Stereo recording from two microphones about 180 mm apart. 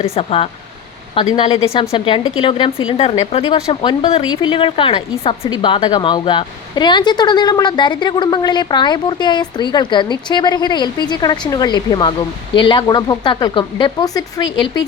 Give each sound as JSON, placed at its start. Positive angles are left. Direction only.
{"t": 0.0, "sound": "a woman's voice", "side_deg": 35}